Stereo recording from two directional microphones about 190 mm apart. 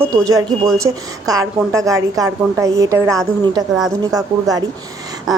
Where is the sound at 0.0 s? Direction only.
15° right (ahead or behind).